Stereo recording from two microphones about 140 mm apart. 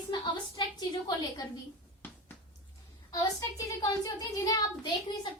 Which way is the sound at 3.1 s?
25° left (ahead or behind).